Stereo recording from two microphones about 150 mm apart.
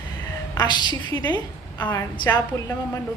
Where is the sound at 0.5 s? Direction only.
30° left (ahead or behind).